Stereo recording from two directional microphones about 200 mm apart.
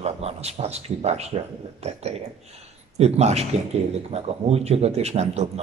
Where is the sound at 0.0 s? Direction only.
30° right (ahead or behind).